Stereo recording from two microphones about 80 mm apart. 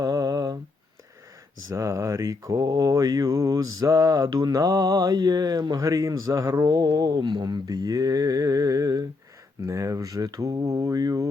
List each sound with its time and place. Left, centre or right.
0.0 s a sound: right
1.7 s mantra: right
5.1 s speech: right
5.8 s mantra: right
9.6 s mantra: right